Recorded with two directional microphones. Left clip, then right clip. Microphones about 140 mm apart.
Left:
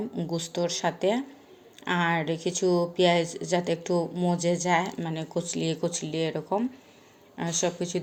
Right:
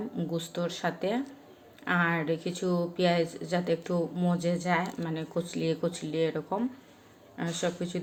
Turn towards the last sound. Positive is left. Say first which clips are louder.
# left 4 dB
turn(degrees=35)  # may be behind; listen again after turning